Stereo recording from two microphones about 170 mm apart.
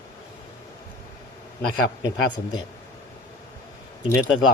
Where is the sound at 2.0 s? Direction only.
25° left (ahead or behind).